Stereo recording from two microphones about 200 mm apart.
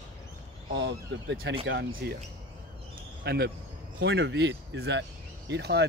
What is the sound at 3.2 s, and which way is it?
Speech, 55° right (ahead or behind).